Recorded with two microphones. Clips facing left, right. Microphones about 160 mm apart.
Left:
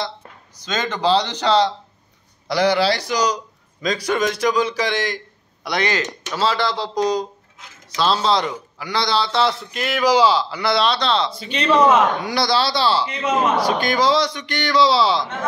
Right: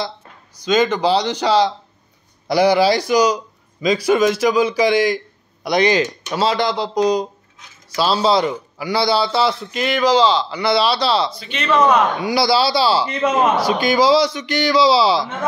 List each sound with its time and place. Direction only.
0.6 s a man's voice: 10° right (ahead or behind)
11.3 s speech: 35° left (ahead or behind)
12.2 s a man's voice: 5° right (ahead or behind)